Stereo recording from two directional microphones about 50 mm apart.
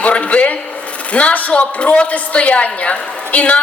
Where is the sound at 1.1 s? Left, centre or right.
Left.